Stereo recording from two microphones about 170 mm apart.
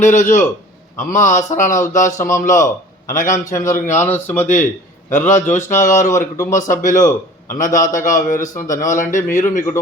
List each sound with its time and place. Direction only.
0.0 s a man's voice: 45° left (ahead or behind)
4.0 s speech: 10° left (ahead or behind)
4.4 s a man's voice: 50° left (ahead or behind)